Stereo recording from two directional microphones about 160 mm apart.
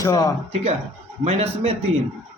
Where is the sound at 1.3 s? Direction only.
40° right (ahead or behind).